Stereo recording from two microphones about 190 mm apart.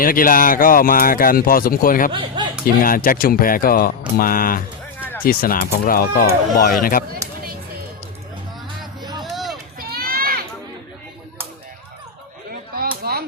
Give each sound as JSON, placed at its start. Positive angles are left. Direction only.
{"t": 0.0, "sound": "speech", "side_deg": 45}
{"t": 2.1, "sound": "speech", "side_deg": -25}
{"t": 2.8, "sound": "speech", "side_deg": 50}
{"t": 9.0, "sound": "music", "side_deg": -20}
{"t": 9.2, "sound": "a sound", "side_deg": 0}
{"t": 9.7, "sound": "children playing", "side_deg": -50}
{"t": 12.7, "sound": "a sound", "side_deg": -55}